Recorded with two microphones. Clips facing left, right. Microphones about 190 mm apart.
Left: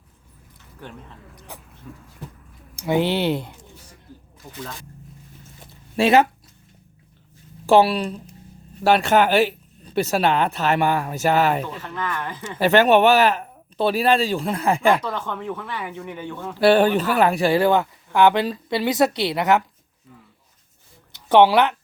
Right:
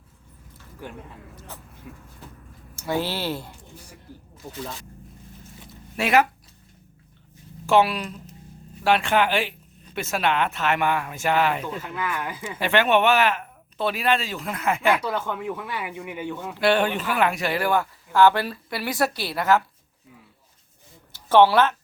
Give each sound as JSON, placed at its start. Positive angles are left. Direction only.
{"t": 1.4, "sound": "speech", "side_deg": 15}
{"t": 2.7, "sound": "speech", "side_deg": 15}
{"t": 6.0, "sound": "speech", "side_deg": 30}
{"t": 7.7, "sound": "speech", "side_deg": 35}
{"t": 11.6, "sound": "speech", "side_deg": -10}
{"t": 12.5, "sound": "speech", "side_deg": 40}
{"t": 15.0, "sound": "speech", "side_deg": -10}
{"t": 16.6, "sound": "speech", "side_deg": 35}
{"t": 21.1, "sound": "speech", "side_deg": 15}